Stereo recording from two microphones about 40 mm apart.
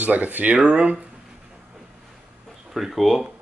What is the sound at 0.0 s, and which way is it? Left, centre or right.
Speech, right.